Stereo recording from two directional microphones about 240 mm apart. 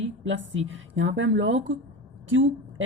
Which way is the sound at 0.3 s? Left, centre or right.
Right.